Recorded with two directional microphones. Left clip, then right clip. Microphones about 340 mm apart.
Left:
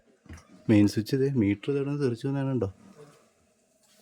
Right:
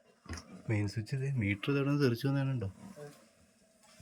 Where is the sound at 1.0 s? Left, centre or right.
Centre.